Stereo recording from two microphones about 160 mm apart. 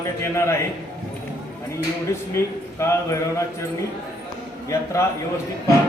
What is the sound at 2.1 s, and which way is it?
A man's voice, 15° left (ahead or behind).